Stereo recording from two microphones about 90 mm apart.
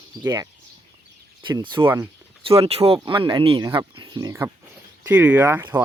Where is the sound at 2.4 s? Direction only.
90° right.